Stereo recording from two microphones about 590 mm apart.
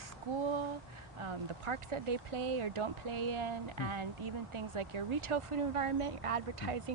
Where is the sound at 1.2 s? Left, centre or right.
Right.